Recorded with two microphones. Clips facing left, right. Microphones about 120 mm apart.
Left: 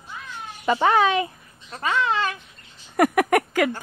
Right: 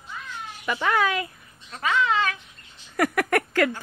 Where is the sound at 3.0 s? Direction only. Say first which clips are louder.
Left 4 dB; 20° left (ahead or behind).